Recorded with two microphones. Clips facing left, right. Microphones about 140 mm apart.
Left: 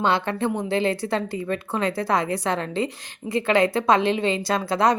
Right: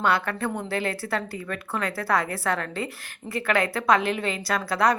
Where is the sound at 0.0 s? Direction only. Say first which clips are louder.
Left 2 dB; 25° left (ahead or behind).